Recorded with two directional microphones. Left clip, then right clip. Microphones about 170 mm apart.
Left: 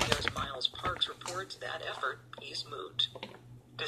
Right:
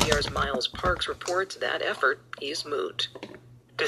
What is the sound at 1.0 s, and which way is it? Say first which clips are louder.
Speech: right 8 dB; 25° right (ahead or behind).